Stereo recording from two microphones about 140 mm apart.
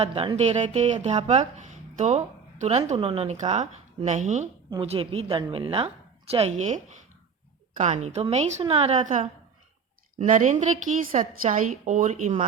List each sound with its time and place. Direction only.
0.0 s speech: 40° right (ahead or behind); by 4.4 s 55° right (ahead or behind)
4.7 s a woman's voice: 35° right (ahead or behind); by 12.3 s 60° right (ahead or behind)